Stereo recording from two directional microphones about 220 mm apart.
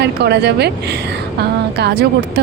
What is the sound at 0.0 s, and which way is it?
Speech, 50° right (ahead or behind).